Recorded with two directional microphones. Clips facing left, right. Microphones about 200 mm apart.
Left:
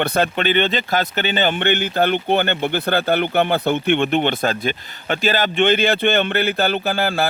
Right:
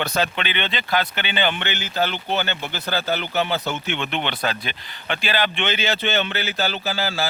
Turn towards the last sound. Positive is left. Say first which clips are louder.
# left 6 dB
turn(degrees=55)  # may be behind; listen again after turning